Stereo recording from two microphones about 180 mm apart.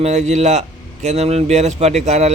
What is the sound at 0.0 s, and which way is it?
A man's voice, 40° right (ahead or behind).